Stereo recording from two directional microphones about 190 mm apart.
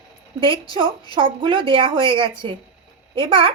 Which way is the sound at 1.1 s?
25° right (ahead or behind).